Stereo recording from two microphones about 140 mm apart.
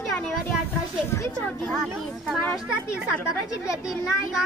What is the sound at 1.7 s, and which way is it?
Speech, 5° left (ahead or behind).